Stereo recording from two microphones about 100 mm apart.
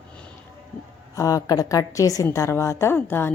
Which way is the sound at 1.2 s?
35° left (ahead or behind).